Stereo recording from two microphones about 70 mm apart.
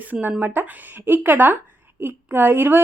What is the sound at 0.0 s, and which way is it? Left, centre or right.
A woman's voice, right.